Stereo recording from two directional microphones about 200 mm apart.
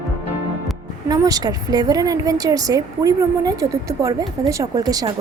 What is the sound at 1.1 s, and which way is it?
A woman's voice, 20° right (ahead or behind).